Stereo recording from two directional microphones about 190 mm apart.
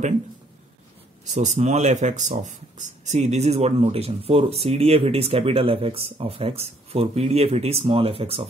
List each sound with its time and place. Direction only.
1.3 s speech: 40° right (ahead or behind)